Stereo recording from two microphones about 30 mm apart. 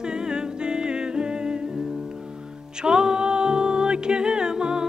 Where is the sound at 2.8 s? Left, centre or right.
Right.